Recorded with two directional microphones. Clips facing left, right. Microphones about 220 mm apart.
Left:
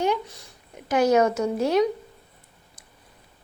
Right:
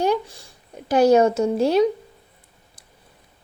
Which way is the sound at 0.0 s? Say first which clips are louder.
Right 3 dB; 30° right (ahead or behind).